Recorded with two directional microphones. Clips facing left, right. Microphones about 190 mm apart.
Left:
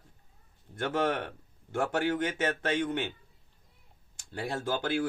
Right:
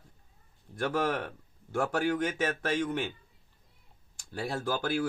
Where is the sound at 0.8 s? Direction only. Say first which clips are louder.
Even; 20° left (ahead or behind).